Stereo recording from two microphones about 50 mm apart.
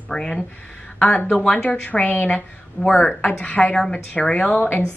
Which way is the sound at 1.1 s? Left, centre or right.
Left.